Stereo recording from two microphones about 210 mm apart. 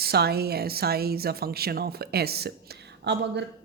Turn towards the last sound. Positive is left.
turn(degrees=-55)  # may be behind; listen again after turning